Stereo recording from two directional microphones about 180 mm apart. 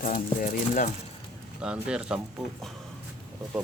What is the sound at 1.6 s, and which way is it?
Speech, 5° right (ahead or behind).